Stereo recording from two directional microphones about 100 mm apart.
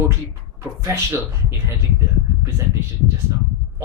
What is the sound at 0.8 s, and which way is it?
Speech, 25° right (ahead or behind).